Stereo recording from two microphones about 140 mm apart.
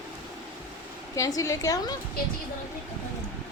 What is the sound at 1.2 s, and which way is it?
Speech, 25° left (ahead or behind).